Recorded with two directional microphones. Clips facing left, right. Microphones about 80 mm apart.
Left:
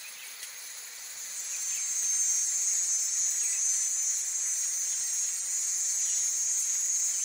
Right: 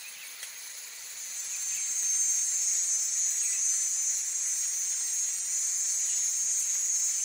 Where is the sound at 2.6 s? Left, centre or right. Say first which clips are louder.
Even; centre.